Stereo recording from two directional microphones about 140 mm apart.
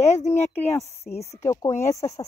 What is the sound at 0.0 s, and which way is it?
Speech, 55° left (ahead or behind).